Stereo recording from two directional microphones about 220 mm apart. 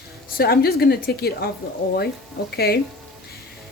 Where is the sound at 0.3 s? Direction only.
45° left (ahead or behind).